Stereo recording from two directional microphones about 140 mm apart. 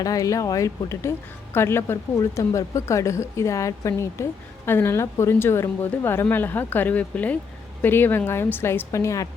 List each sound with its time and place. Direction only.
0.0 s a woman's voice: 25° left (ahead or behind)